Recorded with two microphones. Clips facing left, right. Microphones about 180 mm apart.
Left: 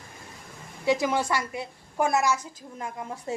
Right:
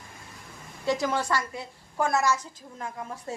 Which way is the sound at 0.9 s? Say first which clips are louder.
Left 2 dB; 15° left (ahead or behind).